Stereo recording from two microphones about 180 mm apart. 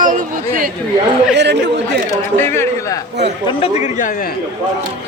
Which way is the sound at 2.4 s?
15° left (ahead or behind).